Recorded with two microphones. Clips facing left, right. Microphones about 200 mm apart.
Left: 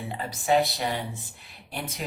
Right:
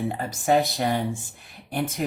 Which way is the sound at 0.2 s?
50° right (ahead or behind).